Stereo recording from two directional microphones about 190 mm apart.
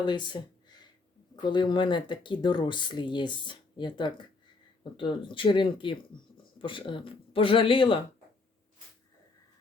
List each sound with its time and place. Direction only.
0.0 s speech: 25° left (ahead or behind)